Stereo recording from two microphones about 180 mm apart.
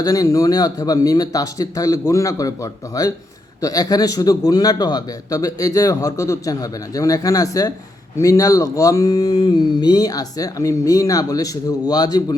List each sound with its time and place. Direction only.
0.0 s a man's voice: 20° left (ahead or behind)